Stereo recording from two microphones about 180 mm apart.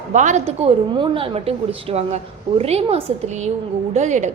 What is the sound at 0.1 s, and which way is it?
A woman's voice, 40° right (ahead or behind).